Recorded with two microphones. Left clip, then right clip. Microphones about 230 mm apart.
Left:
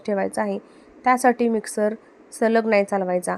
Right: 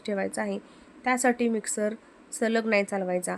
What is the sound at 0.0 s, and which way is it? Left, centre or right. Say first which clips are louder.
Speech: left 6 dB; centre.